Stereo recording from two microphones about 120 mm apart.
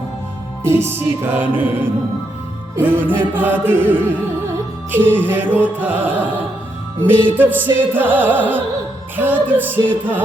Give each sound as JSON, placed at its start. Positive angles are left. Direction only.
{"t": 0.8, "sound": "music", "side_deg": -20}